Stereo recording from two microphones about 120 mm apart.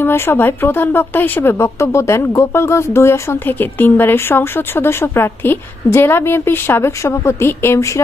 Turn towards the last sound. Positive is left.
turn(degrees=25)  # may be behind; listen again after turning